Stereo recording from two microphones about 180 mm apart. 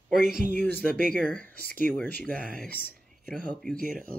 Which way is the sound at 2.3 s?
50° right (ahead or behind).